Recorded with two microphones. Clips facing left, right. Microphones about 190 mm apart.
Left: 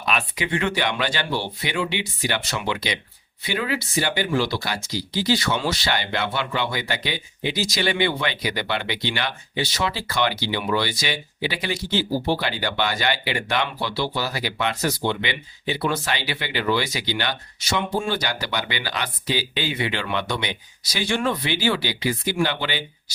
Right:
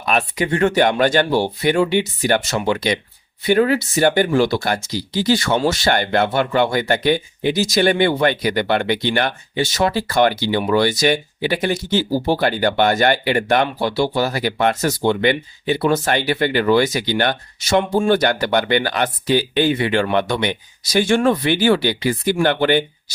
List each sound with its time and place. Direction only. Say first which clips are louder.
0.0 s speech: right 6 dB; 45° right (ahead or behind)